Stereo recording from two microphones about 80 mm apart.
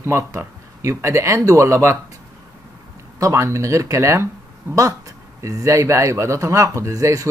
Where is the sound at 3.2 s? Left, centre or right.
Right.